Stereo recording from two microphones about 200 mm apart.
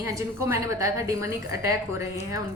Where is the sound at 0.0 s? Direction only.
15° right (ahead or behind).